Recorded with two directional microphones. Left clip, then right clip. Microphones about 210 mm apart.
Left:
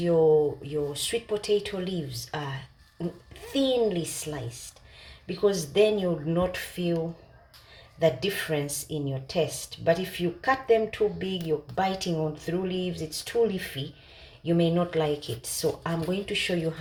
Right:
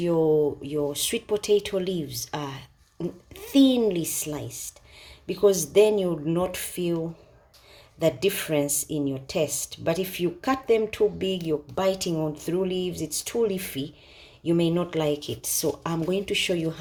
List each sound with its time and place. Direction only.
0.7 s speech: 50° right (ahead or behind)
7.9 s speech: 50° right (ahead or behind)